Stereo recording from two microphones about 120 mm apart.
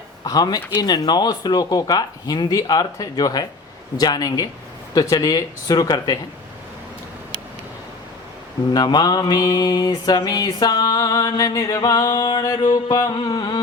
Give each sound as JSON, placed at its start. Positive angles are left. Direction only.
{"t": 0.3, "sound": "mantra", "side_deg": 30}
{"t": 8.7, "sound": "mantra", "side_deg": 35}